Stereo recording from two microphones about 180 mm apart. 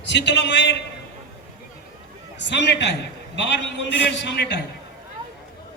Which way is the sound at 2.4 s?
75° left (ahead or behind).